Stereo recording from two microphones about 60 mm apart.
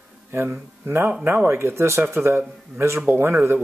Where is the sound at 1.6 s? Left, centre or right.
Right.